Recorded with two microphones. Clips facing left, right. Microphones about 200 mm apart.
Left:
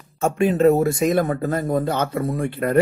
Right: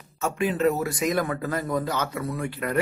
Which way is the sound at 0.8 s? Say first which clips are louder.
Left 6 dB; 25° left (ahead or behind).